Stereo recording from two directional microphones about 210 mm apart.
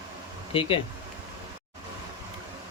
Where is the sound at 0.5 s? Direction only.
25° left (ahead or behind).